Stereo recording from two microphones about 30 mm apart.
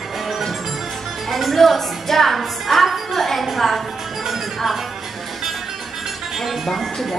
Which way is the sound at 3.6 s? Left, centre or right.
Centre.